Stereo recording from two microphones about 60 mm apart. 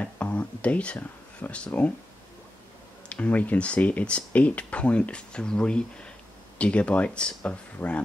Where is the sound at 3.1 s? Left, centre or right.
Left.